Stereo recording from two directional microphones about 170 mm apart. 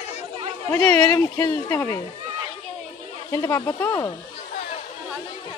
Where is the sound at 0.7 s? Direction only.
10° left (ahead or behind).